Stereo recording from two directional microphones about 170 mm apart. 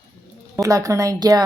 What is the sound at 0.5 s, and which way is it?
Speech, 20° right (ahead or behind).